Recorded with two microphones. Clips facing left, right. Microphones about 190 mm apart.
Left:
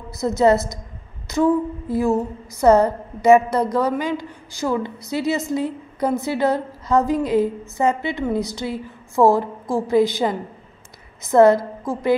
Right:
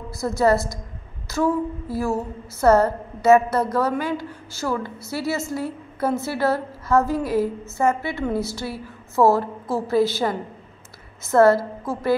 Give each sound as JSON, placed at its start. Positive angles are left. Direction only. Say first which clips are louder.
{"t": 0.2, "sound": "a woman's voice", "louder": "left 3 dB", "side_deg": 20}